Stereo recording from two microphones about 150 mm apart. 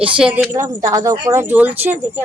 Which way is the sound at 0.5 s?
20° right (ahead or behind).